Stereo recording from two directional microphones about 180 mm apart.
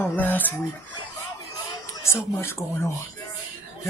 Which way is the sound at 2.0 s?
15° left (ahead or behind).